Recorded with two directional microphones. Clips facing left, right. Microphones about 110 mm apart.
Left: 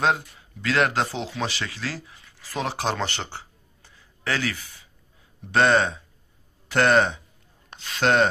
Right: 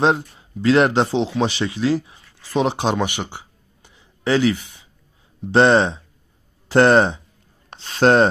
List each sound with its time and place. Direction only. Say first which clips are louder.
0.0 s speech: right 5 dB; 30° right (ahead or behind)